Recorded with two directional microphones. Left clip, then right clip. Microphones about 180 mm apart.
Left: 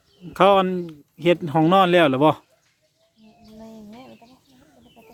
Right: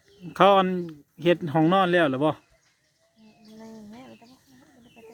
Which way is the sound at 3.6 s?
10° left (ahead or behind).